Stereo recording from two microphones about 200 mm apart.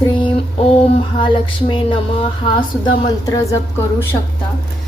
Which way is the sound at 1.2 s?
25° left (ahead or behind).